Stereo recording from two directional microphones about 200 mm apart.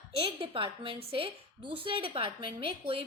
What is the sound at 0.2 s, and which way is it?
A woman's voice, 25° right (ahead or behind).